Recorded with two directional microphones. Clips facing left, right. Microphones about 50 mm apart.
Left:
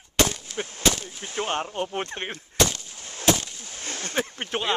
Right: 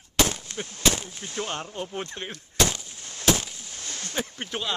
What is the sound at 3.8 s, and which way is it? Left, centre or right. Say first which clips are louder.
Speech: left 4 dB; left.